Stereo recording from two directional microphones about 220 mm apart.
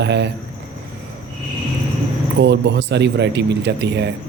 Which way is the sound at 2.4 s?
50° right (ahead or behind).